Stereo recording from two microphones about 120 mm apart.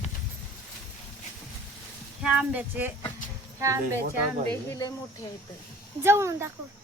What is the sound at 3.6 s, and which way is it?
Speech, 25° right (ahead or behind).